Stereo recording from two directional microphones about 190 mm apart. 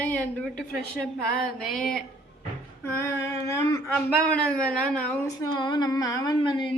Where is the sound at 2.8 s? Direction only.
15° left (ahead or behind).